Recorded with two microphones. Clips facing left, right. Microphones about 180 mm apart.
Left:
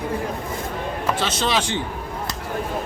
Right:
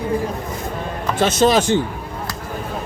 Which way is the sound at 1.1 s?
45° right (ahead or behind).